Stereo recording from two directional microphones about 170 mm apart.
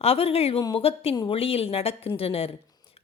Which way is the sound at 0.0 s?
35° left (ahead or behind).